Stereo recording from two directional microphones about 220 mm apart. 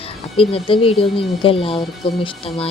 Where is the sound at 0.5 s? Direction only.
25° left (ahead or behind).